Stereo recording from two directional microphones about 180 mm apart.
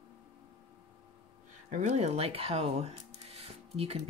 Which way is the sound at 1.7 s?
40° right (ahead or behind).